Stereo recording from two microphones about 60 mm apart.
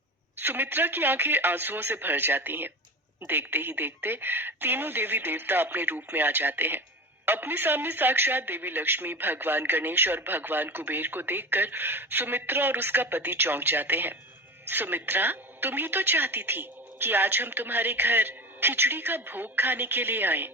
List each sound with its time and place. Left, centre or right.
0.3 s speech: right